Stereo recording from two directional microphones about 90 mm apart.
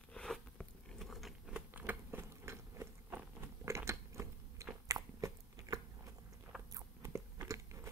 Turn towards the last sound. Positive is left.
turn(degrees=-35)  # may be behind; listen again after turning